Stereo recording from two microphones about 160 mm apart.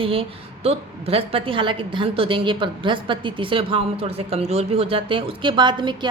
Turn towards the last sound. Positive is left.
turn(degrees=-30)  # may be behind; listen again after turning